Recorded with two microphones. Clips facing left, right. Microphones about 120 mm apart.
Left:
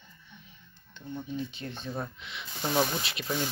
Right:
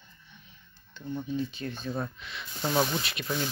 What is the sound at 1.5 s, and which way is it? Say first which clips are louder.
Speech: right 3 dB; 25° left (ahead or behind).